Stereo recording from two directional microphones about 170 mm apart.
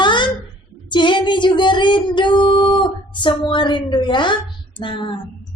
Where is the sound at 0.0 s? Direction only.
25° left (ahead or behind).